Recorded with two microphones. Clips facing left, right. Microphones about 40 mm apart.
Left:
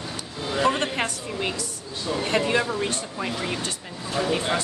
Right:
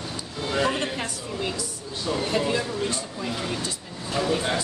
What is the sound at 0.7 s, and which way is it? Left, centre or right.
A woman's voice, left.